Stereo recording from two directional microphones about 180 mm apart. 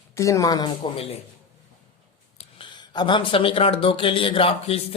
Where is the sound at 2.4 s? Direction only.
25° left (ahead or behind).